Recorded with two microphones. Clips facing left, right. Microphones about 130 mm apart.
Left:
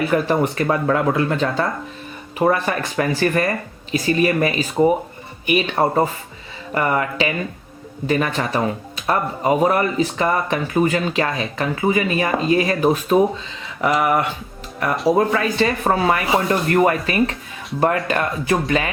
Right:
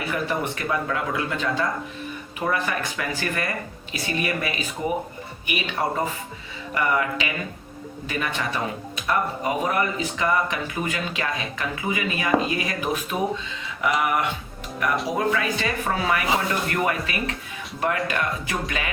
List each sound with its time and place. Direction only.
0.1 s speech: 40° left (ahead or behind)